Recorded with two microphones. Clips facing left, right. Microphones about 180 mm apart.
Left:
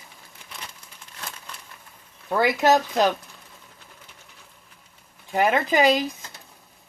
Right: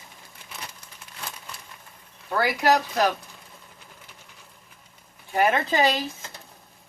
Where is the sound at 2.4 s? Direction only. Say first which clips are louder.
Left 2 dB; 20° left (ahead or behind).